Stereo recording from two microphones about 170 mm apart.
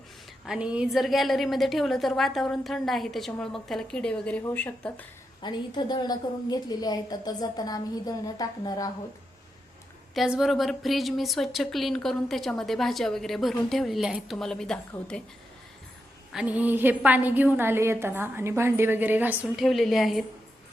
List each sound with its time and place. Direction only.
0.4 s a woman's voice: 5° right (ahead or behind)
5.4 s a woman's voice: 25° left (ahead or behind)
10.2 s a woman's voice: 5° right (ahead or behind)
16.3 s a woman's voice: 5° right (ahead or behind)